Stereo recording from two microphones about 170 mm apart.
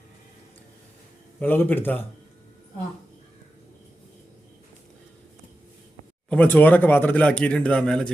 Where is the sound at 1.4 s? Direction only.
10° left (ahead or behind).